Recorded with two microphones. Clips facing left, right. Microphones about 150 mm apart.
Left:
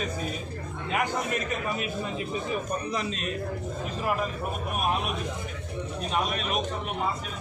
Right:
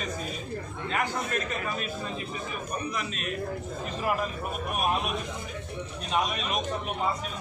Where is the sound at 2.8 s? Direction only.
30° left (ahead or behind).